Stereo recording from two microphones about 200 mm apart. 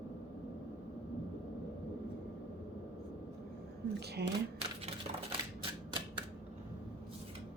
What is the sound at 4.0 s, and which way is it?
Speech, 55° right (ahead or behind).